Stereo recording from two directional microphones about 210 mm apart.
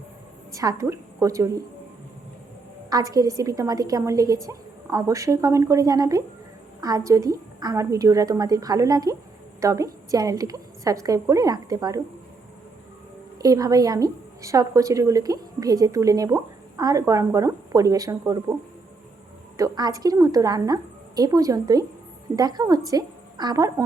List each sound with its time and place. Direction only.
0.5 s a woman's voice: 15° right (ahead or behind)
2.9 s a woman's voice: 15° right (ahead or behind)
13.4 s a woman's voice: 15° right (ahead or behind)
19.5 s a woman's voice: 20° right (ahead or behind)